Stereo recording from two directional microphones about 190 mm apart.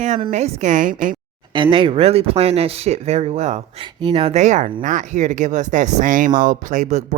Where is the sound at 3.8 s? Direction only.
25° right (ahead or behind).